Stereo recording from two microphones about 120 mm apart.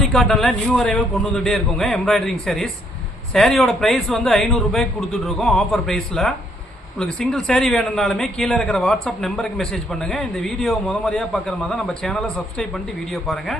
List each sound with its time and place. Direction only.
0.0 s a man's voice: centre (ahead or behind)